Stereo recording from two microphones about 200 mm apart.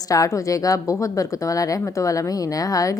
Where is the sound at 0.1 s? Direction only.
15° left (ahead or behind).